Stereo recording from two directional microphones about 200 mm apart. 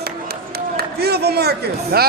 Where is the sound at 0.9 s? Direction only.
55° right (ahead or behind).